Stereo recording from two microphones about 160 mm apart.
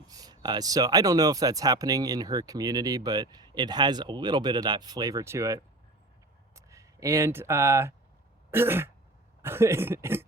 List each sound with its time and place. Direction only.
0.1 s speech: 25° right (ahead or behind)
6.7 s speech: 20° right (ahead or behind)
8.4 s throat clearing: 15° right (ahead or behind)
9.4 s speech: 15° right (ahead or behind)